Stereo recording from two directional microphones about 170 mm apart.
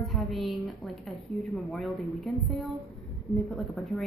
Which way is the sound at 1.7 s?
Centre (ahead or behind).